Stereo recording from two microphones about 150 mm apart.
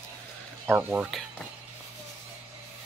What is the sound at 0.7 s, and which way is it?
Speech, 10° right (ahead or behind).